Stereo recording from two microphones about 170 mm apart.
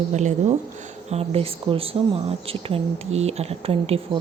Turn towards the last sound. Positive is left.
turn(degrees=-35)  # may be behind; listen again after turning